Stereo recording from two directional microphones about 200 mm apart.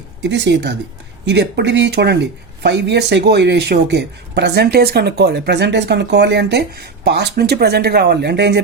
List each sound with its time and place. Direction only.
0.2 s speech: 60° right (ahead or behind)